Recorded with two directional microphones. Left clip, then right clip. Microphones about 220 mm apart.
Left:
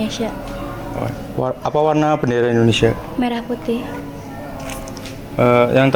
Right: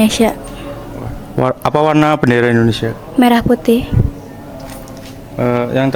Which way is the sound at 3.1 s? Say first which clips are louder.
Right 10 dB; 50° right (ahead or behind).